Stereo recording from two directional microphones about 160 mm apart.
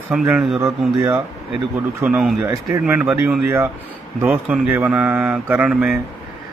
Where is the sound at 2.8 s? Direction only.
10° right (ahead or behind).